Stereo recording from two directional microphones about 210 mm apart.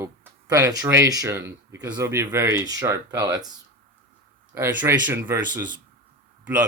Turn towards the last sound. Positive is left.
turn(degrees=-5)  # may be behind; listen again after turning